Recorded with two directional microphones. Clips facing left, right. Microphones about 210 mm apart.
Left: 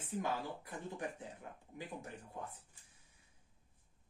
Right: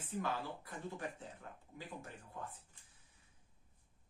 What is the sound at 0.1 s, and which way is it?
Speech, 15° left (ahead or behind).